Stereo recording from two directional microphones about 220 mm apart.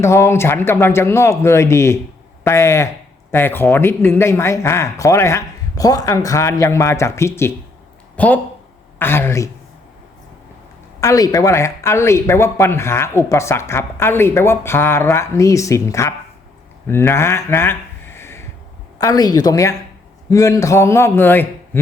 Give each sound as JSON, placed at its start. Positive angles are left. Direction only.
{"t": 0.0, "sound": "speech", "side_deg": 10}
{"t": 11.0, "sound": "speech", "side_deg": 15}
{"t": 16.8, "sound": "a sound", "side_deg": 10}
{"t": 18.9, "sound": "speech", "side_deg": 15}